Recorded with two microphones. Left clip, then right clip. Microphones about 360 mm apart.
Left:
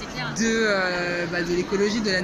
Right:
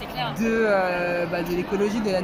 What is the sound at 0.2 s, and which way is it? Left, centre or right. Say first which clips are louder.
Music: even; centre.